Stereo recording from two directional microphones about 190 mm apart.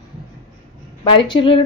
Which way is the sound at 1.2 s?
25° left (ahead or behind).